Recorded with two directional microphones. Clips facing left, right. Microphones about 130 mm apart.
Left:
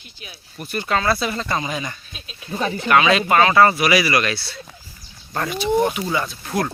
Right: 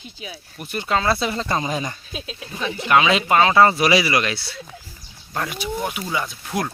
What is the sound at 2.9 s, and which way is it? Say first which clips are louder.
Speech: left 1 dB; 20° right (ahead or behind).